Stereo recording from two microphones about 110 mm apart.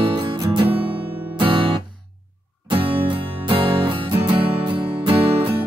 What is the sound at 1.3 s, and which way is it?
Music, 50° right (ahead or behind).